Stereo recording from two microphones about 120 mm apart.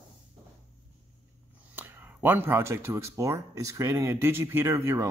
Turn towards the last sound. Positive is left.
turn(degrees=-25)  # may be behind; listen again after turning